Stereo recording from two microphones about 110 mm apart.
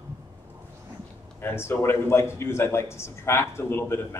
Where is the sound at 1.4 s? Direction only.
20° left (ahead or behind).